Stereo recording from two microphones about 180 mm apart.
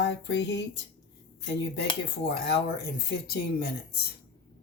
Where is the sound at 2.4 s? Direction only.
65° left (ahead or behind).